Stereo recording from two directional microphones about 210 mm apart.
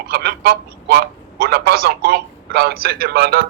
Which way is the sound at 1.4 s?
50° right (ahead or behind).